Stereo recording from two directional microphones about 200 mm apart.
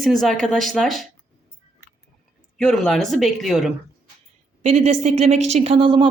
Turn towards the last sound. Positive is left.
turn(degrees=-25)  # may be behind; listen again after turning